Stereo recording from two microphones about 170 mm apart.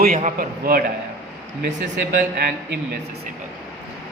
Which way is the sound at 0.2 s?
55° right (ahead or behind).